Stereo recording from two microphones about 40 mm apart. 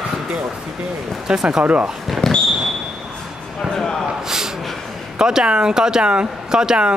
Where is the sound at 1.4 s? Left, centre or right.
Centre.